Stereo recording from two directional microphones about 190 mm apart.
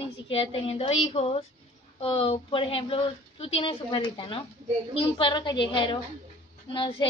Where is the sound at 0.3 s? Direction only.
30° left (ahead or behind).